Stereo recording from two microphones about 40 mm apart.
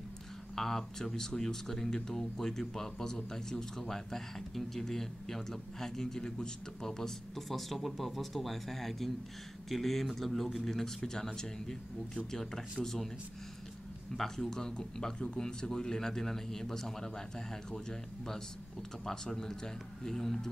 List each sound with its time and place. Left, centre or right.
0.6 s speech: centre
14.1 s a man's voice: centre